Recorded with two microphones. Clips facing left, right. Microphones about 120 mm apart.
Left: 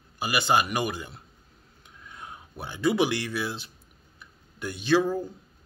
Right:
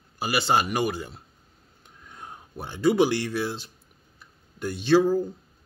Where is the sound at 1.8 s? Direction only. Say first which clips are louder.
Even; 45° right (ahead or behind).